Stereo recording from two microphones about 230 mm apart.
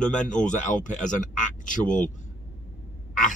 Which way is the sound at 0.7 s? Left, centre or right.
Left.